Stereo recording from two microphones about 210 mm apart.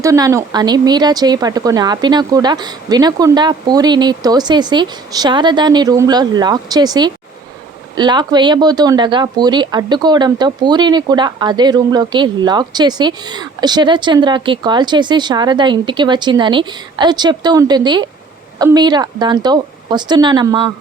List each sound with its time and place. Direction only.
0.0 s speech: 15° right (ahead or behind)